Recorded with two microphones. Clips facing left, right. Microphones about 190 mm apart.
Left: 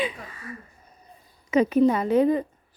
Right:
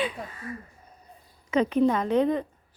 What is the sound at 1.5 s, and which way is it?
Speech, 5° left (ahead or behind).